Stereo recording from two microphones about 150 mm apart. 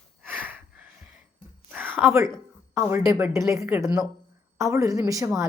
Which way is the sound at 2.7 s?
20° right (ahead or behind).